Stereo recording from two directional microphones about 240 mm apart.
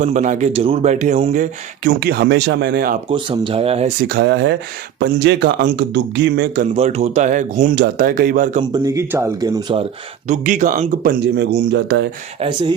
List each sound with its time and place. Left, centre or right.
0.0 s speech: right
3.1 s speech: right
4.1 s speech: right
6.7 s speech: right
8.7 s speech: centre
10.2 s speech: right
12.4 s speech: centre